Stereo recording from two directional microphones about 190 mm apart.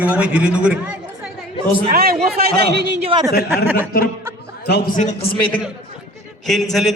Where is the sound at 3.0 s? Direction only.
25° right (ahead or behind).